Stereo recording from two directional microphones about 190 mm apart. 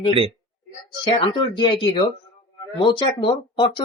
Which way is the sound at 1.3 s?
25° left (ahead or behind).